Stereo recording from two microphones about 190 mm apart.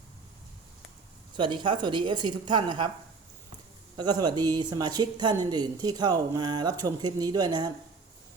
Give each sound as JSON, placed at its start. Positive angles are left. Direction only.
{"t": 1.4, "sound": "speech", "side_deg": -25}
{"t": 3.9, "sound": "speech", "side_deg": -20}